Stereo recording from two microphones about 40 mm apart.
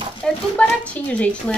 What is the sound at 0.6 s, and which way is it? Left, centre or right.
Speech, left.